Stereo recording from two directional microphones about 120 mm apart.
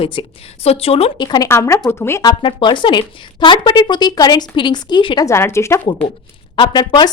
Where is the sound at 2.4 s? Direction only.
45° left (ahead or behind).